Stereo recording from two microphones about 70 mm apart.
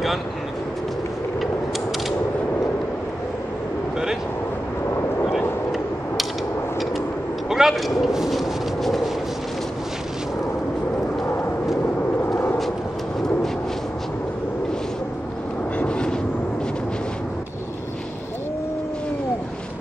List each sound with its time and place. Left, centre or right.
7.4 s a sound: centre
11.2 s vehicle: left
15.8 s vehicle: centre